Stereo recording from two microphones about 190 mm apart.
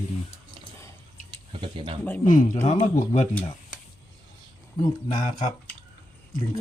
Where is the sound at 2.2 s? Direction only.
45° left (ahead or behind).